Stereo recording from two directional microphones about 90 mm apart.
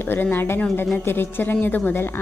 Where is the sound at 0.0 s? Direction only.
25° left (ahead or behind).